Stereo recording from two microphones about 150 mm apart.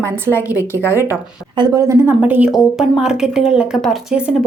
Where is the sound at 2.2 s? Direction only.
10° right (ahead or behind).